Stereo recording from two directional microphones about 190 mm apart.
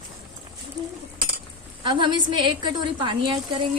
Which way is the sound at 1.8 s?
25° right (ahead or behind).